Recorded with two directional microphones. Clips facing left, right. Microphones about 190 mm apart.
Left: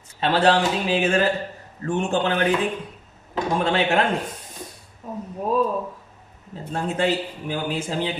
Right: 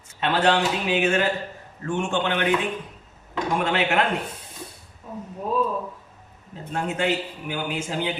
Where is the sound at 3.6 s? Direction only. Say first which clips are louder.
Left 2 dB; 35° left (ahead or behind).